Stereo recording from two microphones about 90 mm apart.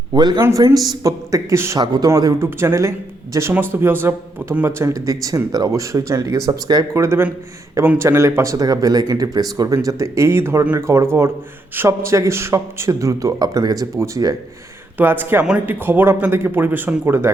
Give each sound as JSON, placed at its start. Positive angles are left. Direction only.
{"t": 0.1, "sound": "a man's voice", "side_deg": -50}
{"t": 2.0, "sound": "speech", "side_deg": -40}
{"t": 2.4, "sound": "a man's voice", "side_deg": -30}
{"t": 6.9, "sound": "a man's voice", "side_deg": -30}
{"t": 9.7, "sound": "a man's voice", "side_deg": -35}
{"t": 14.9, "sound": "speech", "side_deg": -20}